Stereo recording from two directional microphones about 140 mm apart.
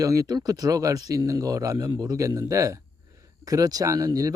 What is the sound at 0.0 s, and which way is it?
Speech, 25° right (ahead or behind).